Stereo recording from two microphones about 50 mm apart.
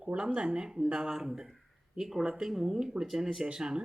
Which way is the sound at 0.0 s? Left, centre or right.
Right.